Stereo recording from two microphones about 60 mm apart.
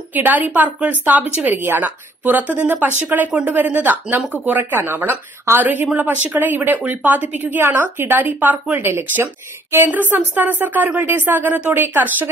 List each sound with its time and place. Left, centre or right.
0.1 s a woman's voice: right
9.8 s speech: right